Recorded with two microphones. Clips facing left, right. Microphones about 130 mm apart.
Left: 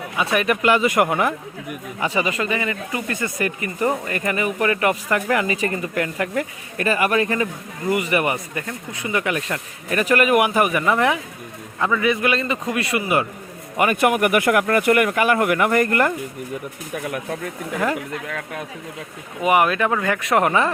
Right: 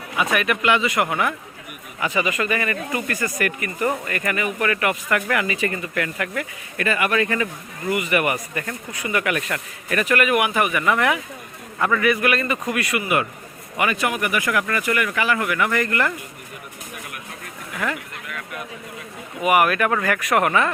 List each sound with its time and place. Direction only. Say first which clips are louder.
0.2 s speech: left 2 dB; 30° left (ahead or behind)
2.0 s speech: even; 30° left (ahead or behind)
11.8 s speech: even; 15° left (ahead or behind)
13.7 s speech: left 5 dB; 50° left (ahead or behind)
17.7 s speech: left 4 dB; 35° left (ahead or behind)
19.4 s speech: even; 25° left (ahead or behind)